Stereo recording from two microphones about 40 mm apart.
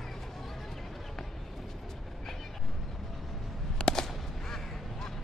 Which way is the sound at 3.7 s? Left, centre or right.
Centre.